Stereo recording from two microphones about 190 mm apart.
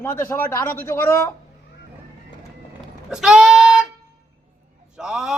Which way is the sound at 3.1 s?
5° right (ahead or behind).